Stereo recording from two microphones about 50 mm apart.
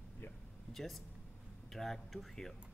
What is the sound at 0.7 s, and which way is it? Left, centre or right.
Speech, centre.